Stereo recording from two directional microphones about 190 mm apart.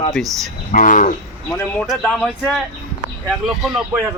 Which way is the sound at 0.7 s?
45° left (ahead or behind).